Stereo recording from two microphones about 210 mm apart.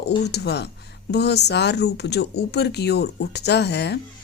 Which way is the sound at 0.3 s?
50° left (ahead or behind).